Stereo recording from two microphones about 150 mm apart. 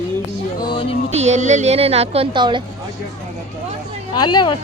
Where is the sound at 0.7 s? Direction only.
35° left (ahead or behind).